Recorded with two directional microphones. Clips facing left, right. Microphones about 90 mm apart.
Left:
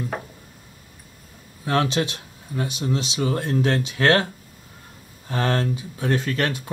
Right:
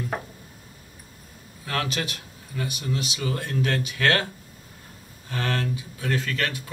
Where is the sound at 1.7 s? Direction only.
25° left (ahead or behind).